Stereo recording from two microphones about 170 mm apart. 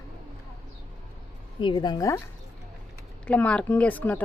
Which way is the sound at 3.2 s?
10° left (ahead or behind).